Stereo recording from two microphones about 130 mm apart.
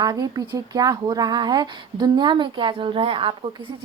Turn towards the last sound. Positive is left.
turn(degrees=-45)  # may be behind; listen again after turning